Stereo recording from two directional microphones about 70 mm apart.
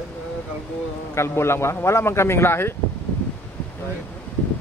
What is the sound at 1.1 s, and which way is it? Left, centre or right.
A man's voice, left.